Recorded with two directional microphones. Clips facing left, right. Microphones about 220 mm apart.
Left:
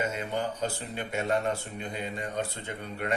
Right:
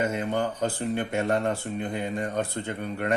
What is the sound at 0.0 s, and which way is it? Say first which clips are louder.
Speech: right 5 dB; 55° right (ahead or behind).